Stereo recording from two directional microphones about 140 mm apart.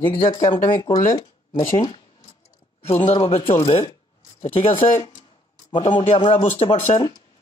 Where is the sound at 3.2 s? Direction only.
45° left (ahead or behind).